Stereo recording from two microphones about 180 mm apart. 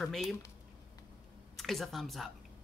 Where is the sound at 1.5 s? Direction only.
Centre (ahead or behind).